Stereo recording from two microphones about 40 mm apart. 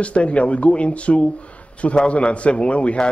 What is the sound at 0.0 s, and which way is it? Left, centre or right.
A man's voice, left.